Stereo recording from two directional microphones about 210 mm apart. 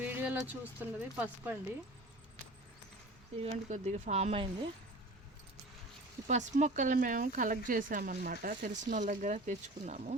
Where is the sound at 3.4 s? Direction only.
30° right (ahead or behind).